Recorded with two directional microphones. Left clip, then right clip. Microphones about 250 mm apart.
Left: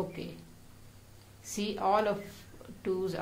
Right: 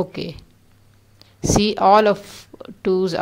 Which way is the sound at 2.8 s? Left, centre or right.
Right.